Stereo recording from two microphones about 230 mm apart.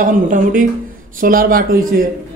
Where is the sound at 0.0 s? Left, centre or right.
Right.